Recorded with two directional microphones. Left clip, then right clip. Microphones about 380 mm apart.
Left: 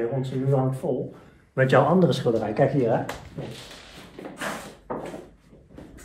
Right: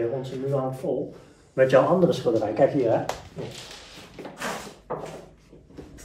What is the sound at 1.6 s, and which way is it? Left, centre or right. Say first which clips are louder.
Speech: right 1 dB; centre.